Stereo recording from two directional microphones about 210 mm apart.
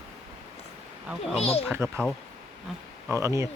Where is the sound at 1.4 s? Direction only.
30° left (ahead or behind).